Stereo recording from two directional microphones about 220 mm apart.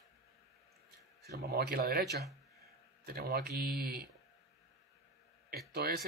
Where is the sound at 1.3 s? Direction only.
45° right (ahead or behind).